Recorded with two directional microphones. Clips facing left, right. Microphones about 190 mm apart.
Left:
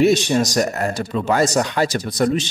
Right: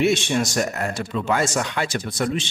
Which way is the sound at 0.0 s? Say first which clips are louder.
Left 5 dB; 40° left (ahead or behind).